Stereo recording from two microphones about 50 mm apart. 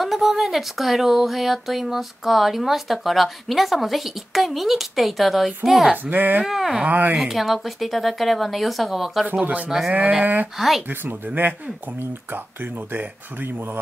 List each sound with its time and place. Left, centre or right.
0.0 s speech: centre
6.0 s speech: right
6.4 s speech: centre
6.8 s speech: right
7.2 s speech: centre
9.2 s speech: right
9.7 s speech: centre
10.2 s speech: right
12.9 s speech: right